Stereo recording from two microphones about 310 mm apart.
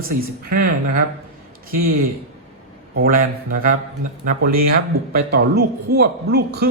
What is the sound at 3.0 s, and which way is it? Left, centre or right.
Speech, right.